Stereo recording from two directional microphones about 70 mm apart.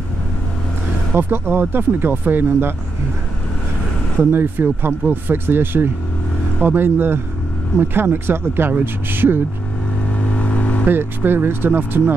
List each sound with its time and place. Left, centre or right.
1.1 s speech: right
4.2 s speech: right
10.1 s vehicle: centre
10.9 s speech: right